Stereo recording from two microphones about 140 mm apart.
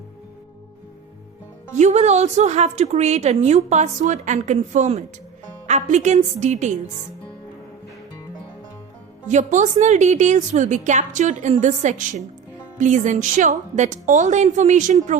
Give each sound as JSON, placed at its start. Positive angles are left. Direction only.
{"t": 1.8, "sound": "a woman's voice", "side_deg": -55}
{"t": 9.3, "sound": "a woman's voice", "side_deg": -60}